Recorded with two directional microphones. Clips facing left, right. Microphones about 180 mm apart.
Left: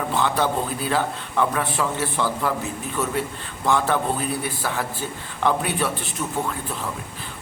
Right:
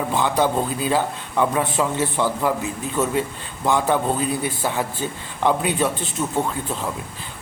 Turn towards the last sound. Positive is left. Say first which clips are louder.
# right 3 dB
turn(degrees=-20)  # may be behind; listen again after turning